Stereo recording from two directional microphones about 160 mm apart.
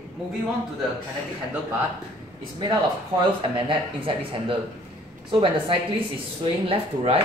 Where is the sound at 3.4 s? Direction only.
30° right (ahead or behind).